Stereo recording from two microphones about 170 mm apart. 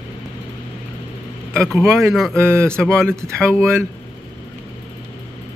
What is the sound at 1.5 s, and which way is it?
Speech, 5° left (ahead or behind).